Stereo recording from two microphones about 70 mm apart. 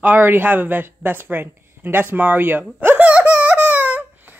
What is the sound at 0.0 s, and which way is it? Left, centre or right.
A child's voice, right.